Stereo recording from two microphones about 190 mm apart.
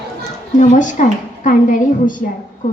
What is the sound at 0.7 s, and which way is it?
A woman's voice, 40° left (ahead or behind).